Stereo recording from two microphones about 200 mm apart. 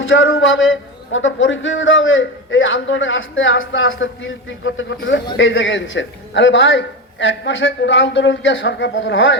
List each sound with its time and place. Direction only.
0.0 s a man's voice: 80° left